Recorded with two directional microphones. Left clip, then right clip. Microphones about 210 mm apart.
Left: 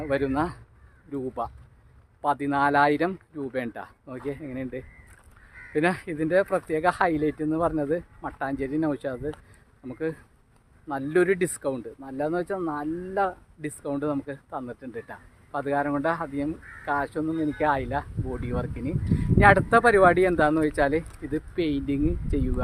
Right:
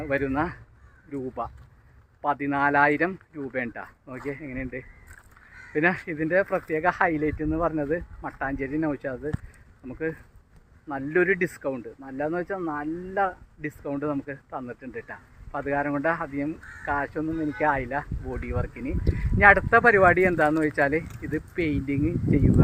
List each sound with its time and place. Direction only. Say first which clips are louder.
0.0 s speech: even; 10° left (ahead or behind)